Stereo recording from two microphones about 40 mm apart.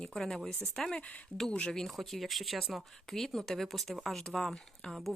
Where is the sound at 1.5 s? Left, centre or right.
Left.